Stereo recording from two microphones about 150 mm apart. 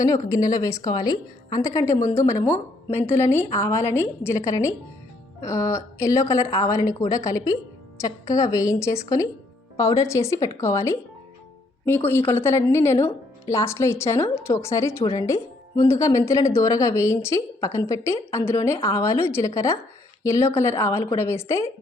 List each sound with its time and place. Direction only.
0.0 s a woman's voice: 25° left (ahead or behind)